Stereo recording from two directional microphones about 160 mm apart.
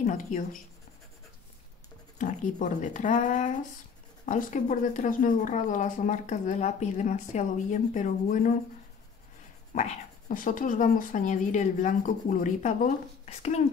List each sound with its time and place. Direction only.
0.0 s speech: 55° left (ahead or behind)
2.1 s speech: 50° left (ahead or behind)
9.8 s speech: 50° left (ahead or behind)